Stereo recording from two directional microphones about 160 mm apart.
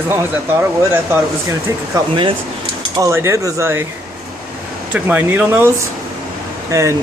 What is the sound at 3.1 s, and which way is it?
Speech, 15° right (ahead or behind).